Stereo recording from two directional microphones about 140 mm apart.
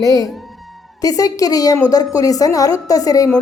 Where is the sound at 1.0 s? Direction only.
25° left (ahead or behind).